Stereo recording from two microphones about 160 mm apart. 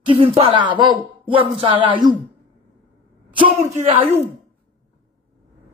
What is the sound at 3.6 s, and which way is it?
Speech, 45° right (ahead or behind).